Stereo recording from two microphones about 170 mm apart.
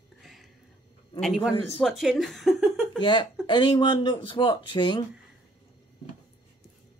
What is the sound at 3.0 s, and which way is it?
Speech, 25° left (ahead or behind).